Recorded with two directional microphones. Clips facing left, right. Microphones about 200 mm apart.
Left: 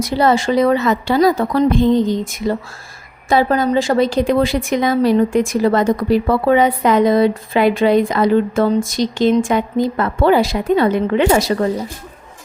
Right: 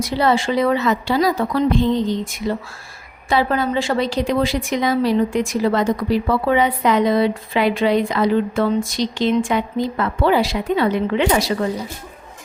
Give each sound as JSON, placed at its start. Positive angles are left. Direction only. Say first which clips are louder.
{"t": 0.0, "sound": "a woman's voice", "louder": "left 3 dB", "side_deg": 45}